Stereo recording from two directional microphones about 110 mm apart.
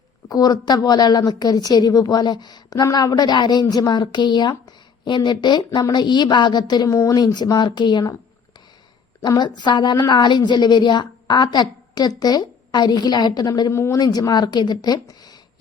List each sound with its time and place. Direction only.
0.3 s a woman's voice: 35° left (ahead or behind)
6.8 s a woman's voice: 30° left (ahead or behind)
9.2 s a woman's voice: 40° left (ahead or behind)